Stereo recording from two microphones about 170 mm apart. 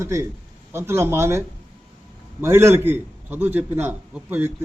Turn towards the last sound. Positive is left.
turn(degrees=-10)  # may be behind; listen again after turning